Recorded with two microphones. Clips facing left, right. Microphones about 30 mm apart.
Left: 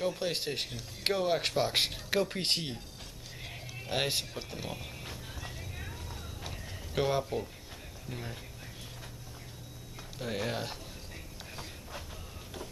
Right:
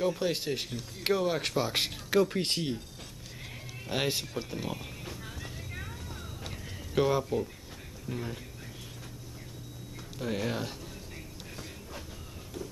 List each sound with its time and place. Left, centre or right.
0.0 s speech: centre
3.9 s speech: centre
5.0 s music: centre
5.8 s vehicle: centre
6.9 s speech: centre
8.1 s speech: centre
10.1 s speech: centre
12.6 s a sound: left